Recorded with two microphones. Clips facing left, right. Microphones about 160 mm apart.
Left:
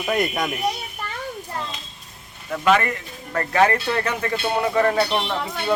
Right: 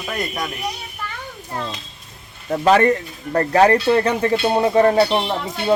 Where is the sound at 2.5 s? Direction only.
35° right (ahead or behind).